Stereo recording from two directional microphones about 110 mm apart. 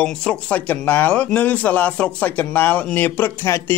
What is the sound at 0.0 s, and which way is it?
Speech, 10° left (ahead or behind).